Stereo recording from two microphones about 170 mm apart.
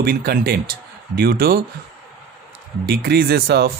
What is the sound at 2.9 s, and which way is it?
Speech, 65° right (ahead or behind).